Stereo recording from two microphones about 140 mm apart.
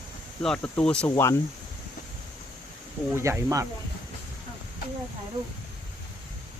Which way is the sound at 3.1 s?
20° right (ahead or behind).